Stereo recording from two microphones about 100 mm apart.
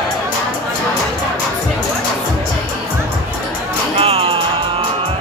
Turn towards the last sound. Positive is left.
turn(degrees=-70)  # may be behind; listen again after turning